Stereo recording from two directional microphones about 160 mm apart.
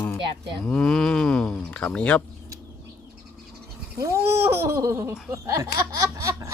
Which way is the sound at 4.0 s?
20° right (ahead or behind).